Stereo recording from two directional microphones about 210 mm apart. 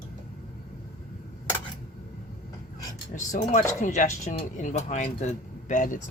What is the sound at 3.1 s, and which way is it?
Speech, 35° left (ahead or behind).